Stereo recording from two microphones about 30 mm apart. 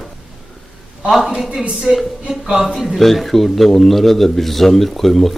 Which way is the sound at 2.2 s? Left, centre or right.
Right.